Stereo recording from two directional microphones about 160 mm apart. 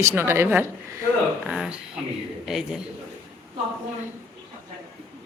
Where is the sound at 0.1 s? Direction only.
15° right (ahead or behind).